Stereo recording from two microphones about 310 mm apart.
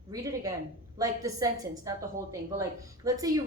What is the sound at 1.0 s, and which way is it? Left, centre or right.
A woman's voice, centre.